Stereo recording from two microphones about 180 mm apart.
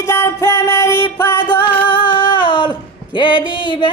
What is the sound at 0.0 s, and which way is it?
Music, 15° left (ahead or behind).